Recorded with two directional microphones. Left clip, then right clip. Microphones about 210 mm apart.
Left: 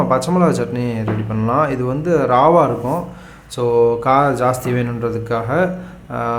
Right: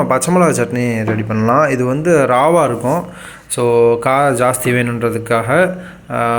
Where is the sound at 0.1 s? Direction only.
15° right (ahead or behind).